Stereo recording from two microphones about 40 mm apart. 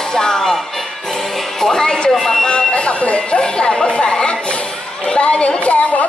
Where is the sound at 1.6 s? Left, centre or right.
Centre.